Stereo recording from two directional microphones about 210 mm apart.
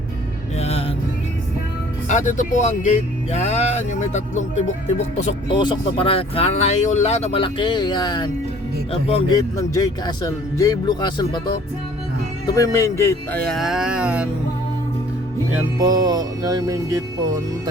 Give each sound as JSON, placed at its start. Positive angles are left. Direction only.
{"t": 0.6, "sound": "music", "side_deg": 30}
{"t": 2.0, "sound": "speech", "side_deg": 35}
{"t": 5.5, "sound": "speech", "side_deg": 20}
{"t": 12.5, "sound": "speech", "side_deg": 15}
{"t": 15.8, "sound": "music", "side_deg": -20}